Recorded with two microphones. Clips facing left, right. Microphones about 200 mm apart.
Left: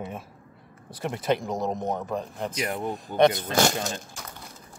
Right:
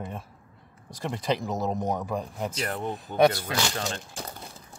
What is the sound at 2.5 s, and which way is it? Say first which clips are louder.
Speech: left 2 dB; 10° left (ahead or behind).